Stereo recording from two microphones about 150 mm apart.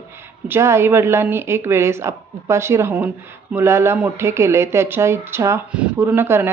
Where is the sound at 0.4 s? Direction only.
15° right (ahead or behind).